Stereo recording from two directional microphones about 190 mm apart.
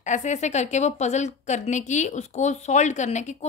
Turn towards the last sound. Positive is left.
turn(degrees=40)  # may be behind; listen again after turning